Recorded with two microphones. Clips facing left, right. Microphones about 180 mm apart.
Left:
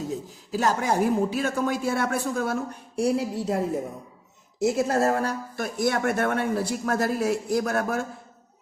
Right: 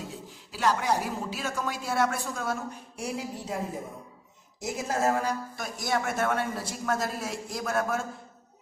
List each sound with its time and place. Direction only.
0.1 s a man's voice: 45° left (ahead or behind); by 3.6 s 65° left (ahead or behind)
4.6 s speech: 65° left (ahead or behind)